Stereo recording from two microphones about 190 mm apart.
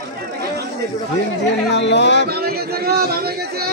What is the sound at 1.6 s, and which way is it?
Speech, 65° left (ahead or behind).